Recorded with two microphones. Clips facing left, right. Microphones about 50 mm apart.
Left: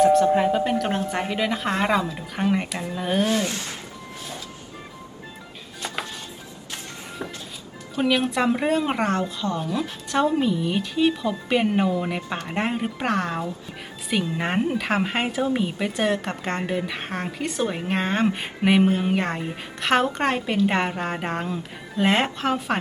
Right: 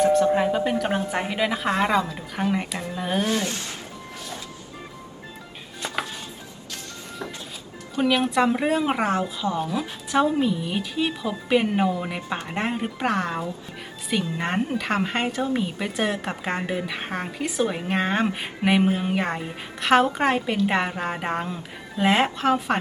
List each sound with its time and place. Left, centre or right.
0.0 s a woman's voice: centre
3.2 s speech: right
7.9 s a woman's voice: centre